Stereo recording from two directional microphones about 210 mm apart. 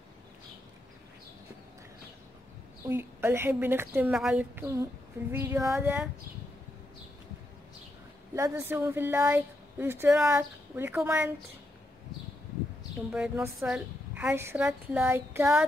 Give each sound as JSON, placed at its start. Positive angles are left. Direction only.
{"t": 2.9, "sound": "a woman's voice", "side_deg": -10}
{"t": 8.4, "sound": "a woman's voice", "side_deg": -10}
{"t": 13.1, "sound": "a woman's voice", "side_deg": -5}